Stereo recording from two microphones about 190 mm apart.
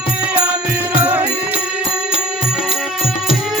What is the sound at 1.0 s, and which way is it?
Music, 10° right (ahead or behind).